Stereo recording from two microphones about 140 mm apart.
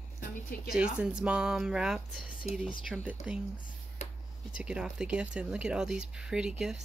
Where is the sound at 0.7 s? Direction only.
5° right (ahead or behind).